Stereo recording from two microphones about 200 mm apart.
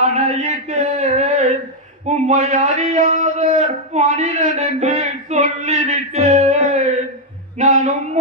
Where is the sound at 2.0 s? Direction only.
35° right (ahead or behind).